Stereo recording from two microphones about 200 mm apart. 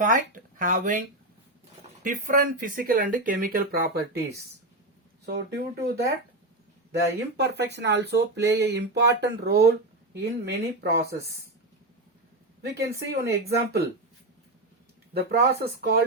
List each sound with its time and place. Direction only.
0.0 s speech: 40° right (ahead or behind)
2.0 s speech: 40° right (ahead or behind)
12.6 s speech: 55° right (ahead or behind)
15.1 s speech: 50° right (ahead or behind)